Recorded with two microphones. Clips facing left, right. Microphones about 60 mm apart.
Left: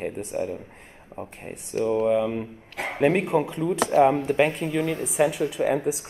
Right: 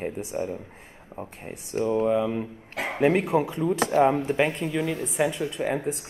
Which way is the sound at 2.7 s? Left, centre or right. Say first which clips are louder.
Right 1 dB; right.